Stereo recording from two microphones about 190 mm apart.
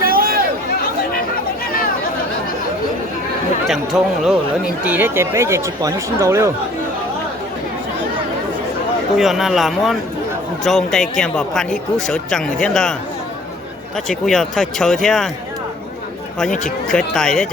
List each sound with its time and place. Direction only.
0.0 s chatter: 50° right (ahead or behind)
3.7 s speech: centre (ahead or behind)
9.1 s speech: centre (ahead or behind)
16.9 s speech: 5° left (ahead or behind)